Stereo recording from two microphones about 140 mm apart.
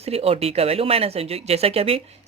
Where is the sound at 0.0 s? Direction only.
45° right (ahead or behind).